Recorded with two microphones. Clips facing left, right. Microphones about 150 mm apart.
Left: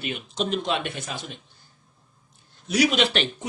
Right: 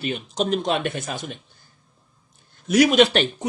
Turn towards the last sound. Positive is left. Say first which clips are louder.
# right 7 dB
turn(degrees=-45)  # may be behind; listen again after turning